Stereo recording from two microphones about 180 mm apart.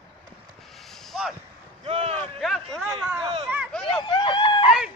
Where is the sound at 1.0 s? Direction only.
Centre (ahead or behind).